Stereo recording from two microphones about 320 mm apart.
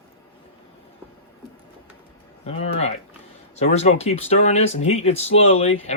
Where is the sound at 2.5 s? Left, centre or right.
Centre.